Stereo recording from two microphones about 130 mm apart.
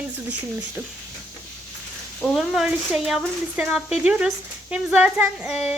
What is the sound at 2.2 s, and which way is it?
Speech, centre (ahead or behind).